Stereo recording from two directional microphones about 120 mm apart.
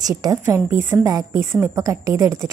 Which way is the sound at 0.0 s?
30° right (ahead or behind).